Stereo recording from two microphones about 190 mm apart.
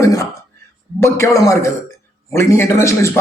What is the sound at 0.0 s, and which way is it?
Whispering, 15° left (ahead or behind).